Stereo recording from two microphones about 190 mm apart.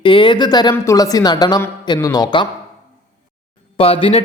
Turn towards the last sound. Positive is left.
turn(degrees=30)  # may be behind; listen again after turning